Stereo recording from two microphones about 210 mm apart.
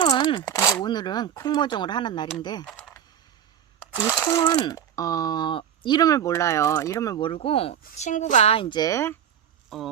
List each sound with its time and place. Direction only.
0.0 s speech: 25° left (ahead or behind)
2.6 s typing: 5° left (ahead or behind)
3.9 s speech: 10° left (ahead or behind)
9.6 s speech: centre (ahead or behind)